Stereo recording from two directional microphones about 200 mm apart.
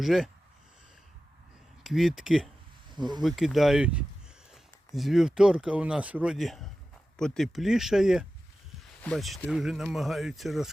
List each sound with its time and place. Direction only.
0.0 s speech: centre (ahead or behind)
1.8 s speech: centre (ahead or behind)
2.9 s speech: 20° right (ahead or behind)
3.2 s speech: centre (ahead or behind)